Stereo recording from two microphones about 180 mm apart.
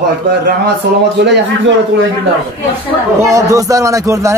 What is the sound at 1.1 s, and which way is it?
Speech, 75° right (ahead or behind).